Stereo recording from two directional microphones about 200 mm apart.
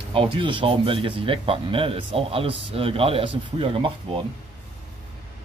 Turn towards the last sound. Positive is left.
turn(degrees=-25)  # may be behind; listen again after turning